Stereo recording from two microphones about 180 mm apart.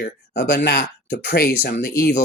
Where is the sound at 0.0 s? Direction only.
65° left (ahead or behind).